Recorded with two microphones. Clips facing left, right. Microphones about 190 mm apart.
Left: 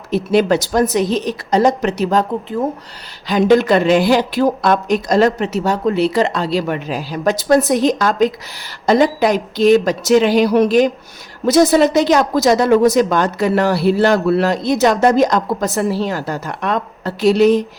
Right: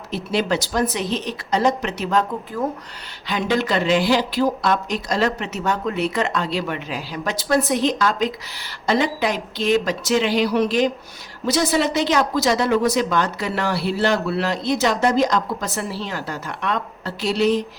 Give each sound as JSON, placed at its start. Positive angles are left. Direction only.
{"t": 0.1, "sound": "a woman's voice", "side_deg": 50}
{"t": 3.2, "sound": "speech", "side_deg": 40}